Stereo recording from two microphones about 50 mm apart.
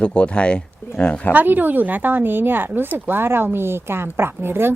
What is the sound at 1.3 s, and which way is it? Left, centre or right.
Speech, right.